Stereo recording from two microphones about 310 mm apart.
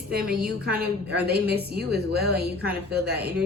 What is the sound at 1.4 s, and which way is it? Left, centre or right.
A woman's voice, right.